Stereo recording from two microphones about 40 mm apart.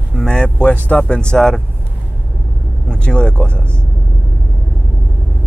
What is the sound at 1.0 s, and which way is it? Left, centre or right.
Speech, left.